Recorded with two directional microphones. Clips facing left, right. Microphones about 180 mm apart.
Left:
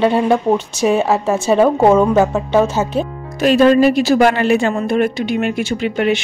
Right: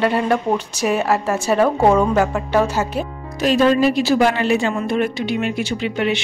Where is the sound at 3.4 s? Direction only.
60° left (ahead or behind).